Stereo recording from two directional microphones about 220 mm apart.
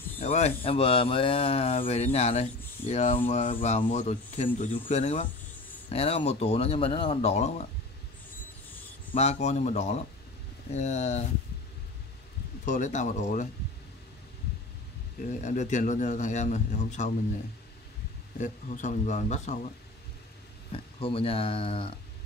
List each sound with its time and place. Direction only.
0.2 s speech: 30° left (ahead or behind)
9.1 s speech: 30° left (ahead or behind)
12.6 s speech: 35° left (ahead or behind)
15.2 s speech: 35° left (ahead or behind)
18.4 s speech: 35° left (ahead or behind)
20.7 s speech: 25° left (ahead or behind)